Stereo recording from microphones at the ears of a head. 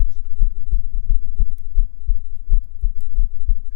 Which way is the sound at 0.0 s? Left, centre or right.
Left.